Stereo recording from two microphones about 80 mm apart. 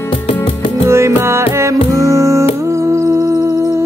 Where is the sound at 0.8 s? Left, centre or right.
Right.